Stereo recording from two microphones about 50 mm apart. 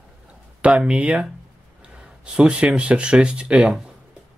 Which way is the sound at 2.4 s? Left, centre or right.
Centre.